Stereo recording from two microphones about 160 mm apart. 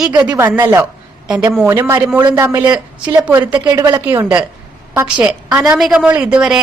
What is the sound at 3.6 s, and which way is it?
A woman's voice, 20° right (ahead or behind).